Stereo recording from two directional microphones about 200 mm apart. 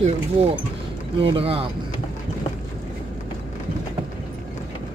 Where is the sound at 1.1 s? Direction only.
25° right (ahead or behind).